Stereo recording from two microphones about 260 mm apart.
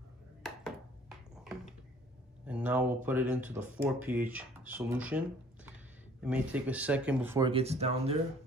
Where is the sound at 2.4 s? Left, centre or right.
Centre.